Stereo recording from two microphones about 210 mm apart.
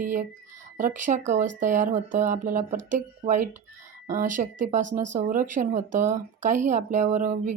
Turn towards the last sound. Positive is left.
turn(degrees=-35)  # may be behind; listen again after turning